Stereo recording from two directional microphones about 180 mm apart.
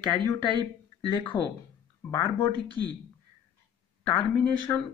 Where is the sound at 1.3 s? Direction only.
25° left (ahead or behind).